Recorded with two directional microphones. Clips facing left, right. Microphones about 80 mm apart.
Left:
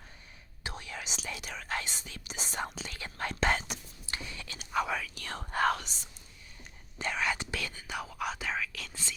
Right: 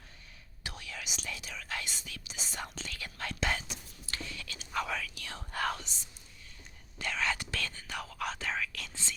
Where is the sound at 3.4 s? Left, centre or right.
Left.